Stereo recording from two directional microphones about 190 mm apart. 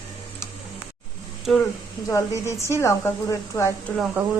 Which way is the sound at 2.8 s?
15° left (ahead or behind).